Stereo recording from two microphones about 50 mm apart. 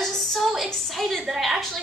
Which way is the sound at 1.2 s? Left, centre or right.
Centre.